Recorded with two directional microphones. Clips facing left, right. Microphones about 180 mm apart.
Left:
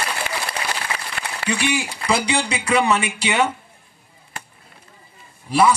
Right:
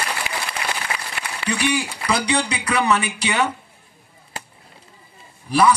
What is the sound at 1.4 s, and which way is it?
Speech, 25° left (ahead or behind).